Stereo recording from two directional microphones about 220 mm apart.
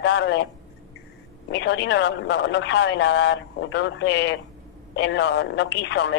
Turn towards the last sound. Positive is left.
turn(degrees=50)  # may be behind; listen again after turning